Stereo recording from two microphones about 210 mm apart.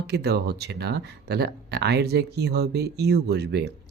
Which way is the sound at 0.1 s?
50° right (ahead or behind).